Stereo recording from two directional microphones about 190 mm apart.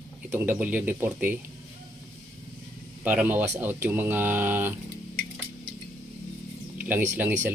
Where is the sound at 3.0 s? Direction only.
10° right (ahead or behind).